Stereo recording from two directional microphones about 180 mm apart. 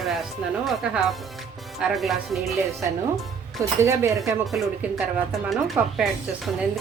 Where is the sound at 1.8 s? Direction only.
5° right (ahead or behind).